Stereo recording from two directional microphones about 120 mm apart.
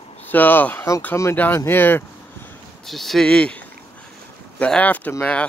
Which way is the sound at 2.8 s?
Centre (ahead or behind).